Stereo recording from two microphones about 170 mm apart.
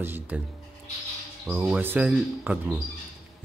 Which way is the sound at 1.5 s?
5° right (ahead or behind).